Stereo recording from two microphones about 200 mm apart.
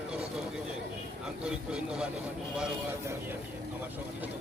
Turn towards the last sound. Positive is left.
turn(degrees=-5)  # may be behind; listen again after turning